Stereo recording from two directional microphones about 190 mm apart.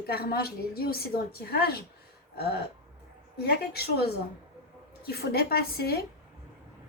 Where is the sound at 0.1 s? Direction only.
55° left (ahead or behind).